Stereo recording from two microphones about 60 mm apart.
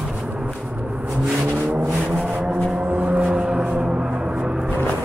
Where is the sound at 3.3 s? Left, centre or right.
Centre.